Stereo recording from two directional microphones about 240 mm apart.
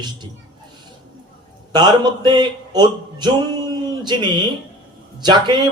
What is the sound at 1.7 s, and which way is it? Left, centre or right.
A man's voice, centre.